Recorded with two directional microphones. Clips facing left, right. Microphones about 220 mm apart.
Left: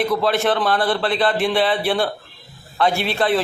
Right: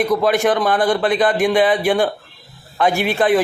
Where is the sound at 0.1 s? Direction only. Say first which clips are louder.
Right 3 dB; 15° right (ahead or behind).